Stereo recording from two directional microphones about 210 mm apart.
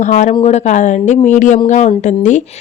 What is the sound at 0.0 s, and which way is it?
A woman's voice, 35° left (ahead or behind).